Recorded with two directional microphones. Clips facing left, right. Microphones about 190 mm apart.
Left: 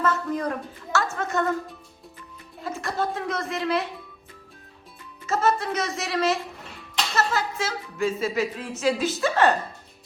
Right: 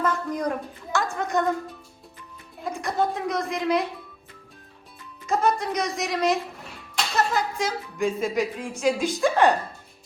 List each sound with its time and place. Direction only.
0.0 s a woman's voice: 15° right (ahead or behind)
2.6 s music: 15° right (ahead or behind)
3.2 s a woman's voice: 15° right (ahead or behind)
5.2 s a woman's voice: 15° right (ahead or behind)